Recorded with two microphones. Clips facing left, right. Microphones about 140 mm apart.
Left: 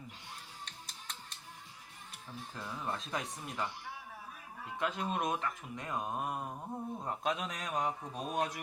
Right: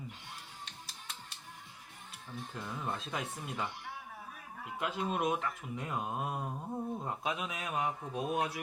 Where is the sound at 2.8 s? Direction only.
5° right (ahead or behind).